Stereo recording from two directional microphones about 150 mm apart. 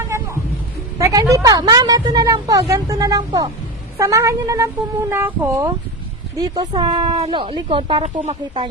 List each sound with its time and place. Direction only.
0.9 s a woman's voice: 20° right (ahead or behind)
6.9 s speech: 35° right (ahead or behind)